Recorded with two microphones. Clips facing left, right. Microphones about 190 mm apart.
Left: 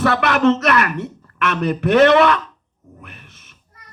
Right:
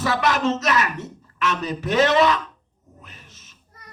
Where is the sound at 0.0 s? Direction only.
60° left (ahead or behind).